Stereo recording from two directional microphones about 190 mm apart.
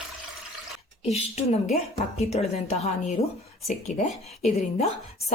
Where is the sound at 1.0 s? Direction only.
35° left (ahead or behind).